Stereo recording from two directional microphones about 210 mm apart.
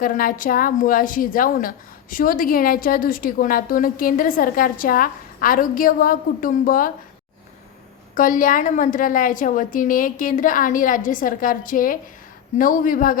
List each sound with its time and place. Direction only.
0.0 s a woman's voice: 40° left (ahead or behind)
8.1 s a woman's voice: 40° left (ahead or behind)